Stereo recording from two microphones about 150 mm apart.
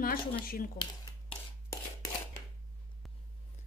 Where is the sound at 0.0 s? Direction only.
75° left (ahead or behind).